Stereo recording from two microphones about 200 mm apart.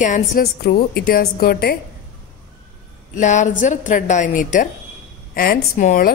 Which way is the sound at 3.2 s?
35° left (ahead or behind).